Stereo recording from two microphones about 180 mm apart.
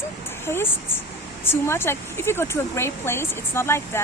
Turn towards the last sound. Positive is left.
turn(degrees=15)  # may be behind; listen again after turning